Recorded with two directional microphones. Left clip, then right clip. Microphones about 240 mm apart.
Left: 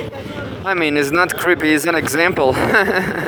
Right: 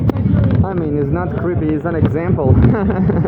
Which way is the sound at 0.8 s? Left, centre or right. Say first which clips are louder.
Left 8 dB; left.